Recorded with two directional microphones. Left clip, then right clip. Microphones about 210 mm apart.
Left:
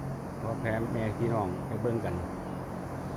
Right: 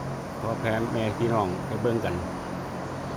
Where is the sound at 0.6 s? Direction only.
10° right (ahead or behind).